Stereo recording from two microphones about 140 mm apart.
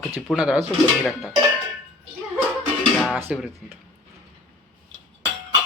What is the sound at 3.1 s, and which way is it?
Speech, 10° right (ahead or behind).